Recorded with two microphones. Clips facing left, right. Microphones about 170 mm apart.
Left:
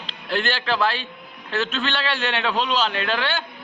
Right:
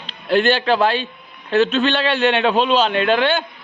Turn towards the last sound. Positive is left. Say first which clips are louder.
# right 8 dB
turn(degrees=-20)  # may be behind; listen again after turning